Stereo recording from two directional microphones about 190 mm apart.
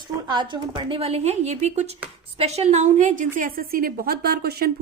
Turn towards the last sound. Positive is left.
turn(degrees=-55)  # may be behind; listen again after turning